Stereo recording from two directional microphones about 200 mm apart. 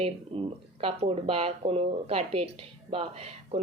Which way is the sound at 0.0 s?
30° right (ahead or behind).